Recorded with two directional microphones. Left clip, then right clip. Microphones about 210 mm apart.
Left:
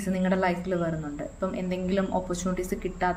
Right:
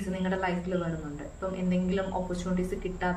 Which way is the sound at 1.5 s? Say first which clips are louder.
Left 1 dB; 50° left (ahead or behind).